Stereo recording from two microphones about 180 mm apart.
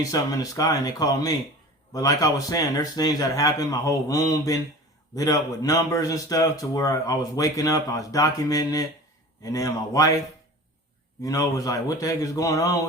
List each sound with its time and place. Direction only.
0.0 s a man's voice: 20° left (ahead or behind)
11.2 s a man's voice: 20° left (ahead or behind)